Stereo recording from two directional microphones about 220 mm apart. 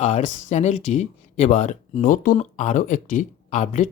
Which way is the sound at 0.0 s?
30° left (ahead or behind).